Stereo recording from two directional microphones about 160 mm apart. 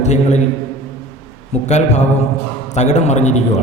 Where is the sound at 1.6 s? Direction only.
45° left (ahead or behind).